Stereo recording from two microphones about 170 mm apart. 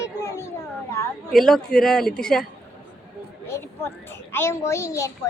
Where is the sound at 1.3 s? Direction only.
Centre (ahead or behind).